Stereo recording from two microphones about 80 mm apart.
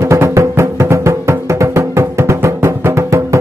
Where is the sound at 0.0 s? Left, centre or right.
Right.